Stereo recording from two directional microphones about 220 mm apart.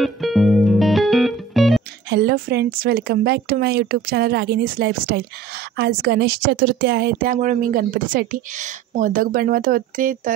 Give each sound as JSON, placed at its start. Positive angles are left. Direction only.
{"t": 0.0, "sound": "music", "side_deg": 0}
{"t": 2.0, "sound": "a woman's voice", "side_deg": -45}